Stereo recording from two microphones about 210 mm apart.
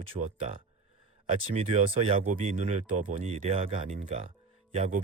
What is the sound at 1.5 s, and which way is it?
Speech, 30° right (ahead or behind).